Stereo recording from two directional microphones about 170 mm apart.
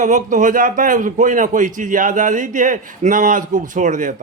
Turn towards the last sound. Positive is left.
turn(degrees=-45)  # may be behind; listen again after turning